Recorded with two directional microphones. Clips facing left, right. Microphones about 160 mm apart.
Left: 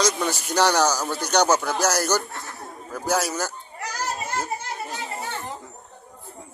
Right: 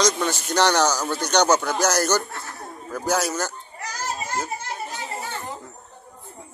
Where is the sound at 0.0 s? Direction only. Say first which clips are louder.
Right 1 dB; 5° left (ahead or behind).